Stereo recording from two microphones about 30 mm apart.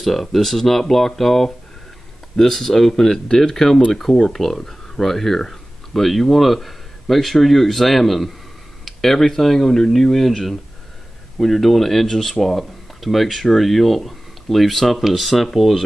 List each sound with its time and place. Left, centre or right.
0.0 s a man's voice: centre